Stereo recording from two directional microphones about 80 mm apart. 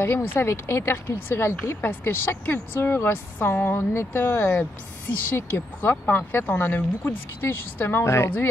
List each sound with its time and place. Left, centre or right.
0.0 s a woman's voice: left